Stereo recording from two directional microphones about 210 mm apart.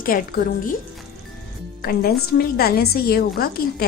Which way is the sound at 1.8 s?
45° left (ahead or behind).